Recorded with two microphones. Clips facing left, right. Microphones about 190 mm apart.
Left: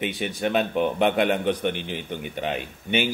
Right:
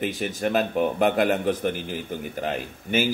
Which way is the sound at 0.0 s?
Centre (ahead or behind).